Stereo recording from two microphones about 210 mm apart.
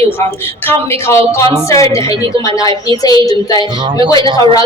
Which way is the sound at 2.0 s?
25° right (ahead or behind).